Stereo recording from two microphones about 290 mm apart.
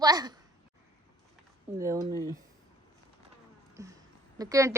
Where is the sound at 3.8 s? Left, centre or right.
Centre.